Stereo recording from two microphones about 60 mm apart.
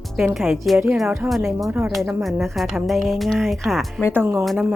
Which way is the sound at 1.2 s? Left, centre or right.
Right.